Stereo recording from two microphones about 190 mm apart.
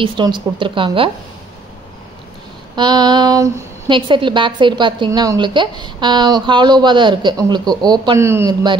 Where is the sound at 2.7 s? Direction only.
20° right (ahead or behind).